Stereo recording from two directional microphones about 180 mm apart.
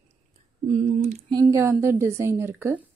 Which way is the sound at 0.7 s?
40° right (ahead or behind).